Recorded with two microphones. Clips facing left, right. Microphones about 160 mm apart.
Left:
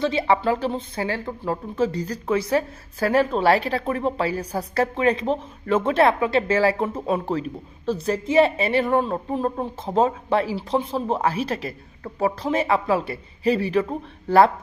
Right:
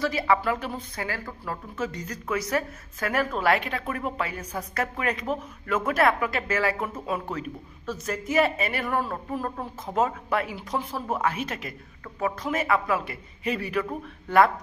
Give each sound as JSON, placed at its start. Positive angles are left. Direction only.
{"t": 0.0, "sound": "speech", "side_deg": 25}